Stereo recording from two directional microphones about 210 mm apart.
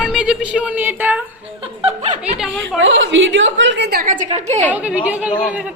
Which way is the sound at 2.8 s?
60° right (ahead or behind).